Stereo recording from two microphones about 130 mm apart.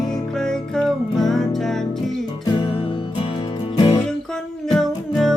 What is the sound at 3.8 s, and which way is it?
Music, 45° left (ahead or behind).